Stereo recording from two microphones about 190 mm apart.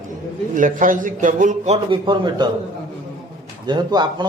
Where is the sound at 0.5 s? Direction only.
45° right (ahead or behind).